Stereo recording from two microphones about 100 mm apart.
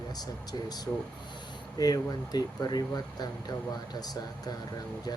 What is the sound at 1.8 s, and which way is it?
Speech, 40° left (ahead or behind).